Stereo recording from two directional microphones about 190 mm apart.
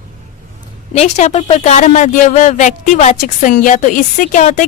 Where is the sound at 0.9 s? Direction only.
35° left (ahead or behind).